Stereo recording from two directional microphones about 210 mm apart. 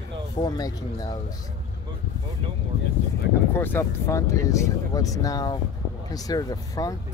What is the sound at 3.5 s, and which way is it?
Speech, 10° left (ahead or behind).